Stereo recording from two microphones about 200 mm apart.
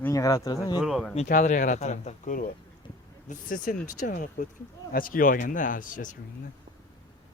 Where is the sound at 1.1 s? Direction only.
40° left (ahead or behind).